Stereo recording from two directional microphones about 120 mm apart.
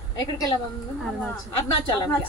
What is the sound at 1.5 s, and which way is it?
Speech, 35° left (ahead or behind).